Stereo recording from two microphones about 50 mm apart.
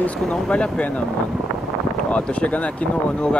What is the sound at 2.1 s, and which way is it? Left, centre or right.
Speech, left.